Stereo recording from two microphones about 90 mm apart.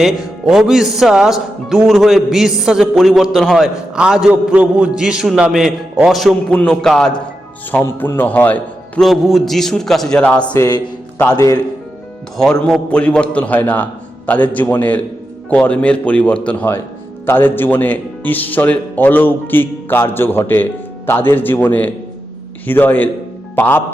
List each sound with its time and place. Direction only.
0.0 s speech: 5° right (ahead or behind)
6.5 s a man's voice: 10° left (ahead or behind)
7.7 s speech: 20° left (ahead or behind)
9.0 s speech: centre (ahead or behind)
10.2 s a man's voice: 15° left (ahead or behind)
10.6 s a man's voice: 45° left (ahead or behind)
12.4 s a man's voice: 5° left (ahead or behind); by 23.8 s 20° left (ahead or behind)